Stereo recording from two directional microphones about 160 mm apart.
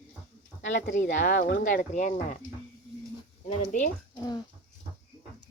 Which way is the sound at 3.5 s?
45° left (ahead or behind).